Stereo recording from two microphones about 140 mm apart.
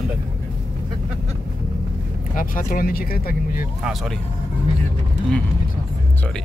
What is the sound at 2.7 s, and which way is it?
Speech, 90° left.